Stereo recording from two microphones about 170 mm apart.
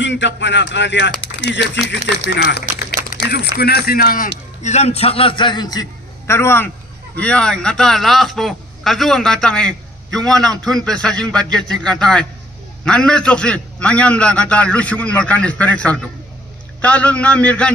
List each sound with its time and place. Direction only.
0.0 s speech: 90° left
2.3 s a sound: 70° left (ahead or behind)
3.3 s speech: 70° left (ahead or behind)
4.6 s a man's voice: 40° left (ahead or behind); by 17.7 s 5° left (ahead or behind)